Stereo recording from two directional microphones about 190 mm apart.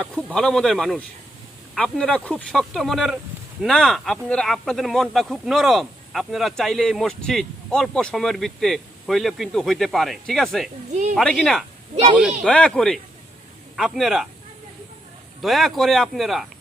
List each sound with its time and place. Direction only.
0.0 s speech: 5° left (ahead or behind)
15.4 s speech: centre (ahead or behind)